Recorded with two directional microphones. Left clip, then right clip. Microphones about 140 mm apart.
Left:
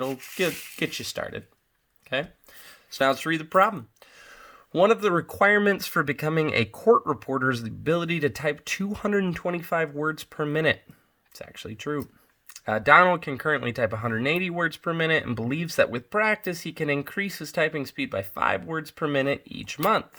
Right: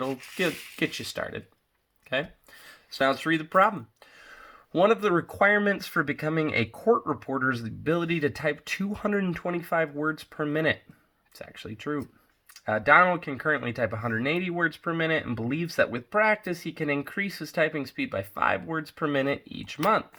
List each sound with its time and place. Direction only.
0.3 s speech: 20° left (ahead or behind)
2.6 s speech: 25° left (ahead or behind)
11.3 s speech: 25° left (ahead or behind)
12.5 s speech: 40° left (ahead or behind)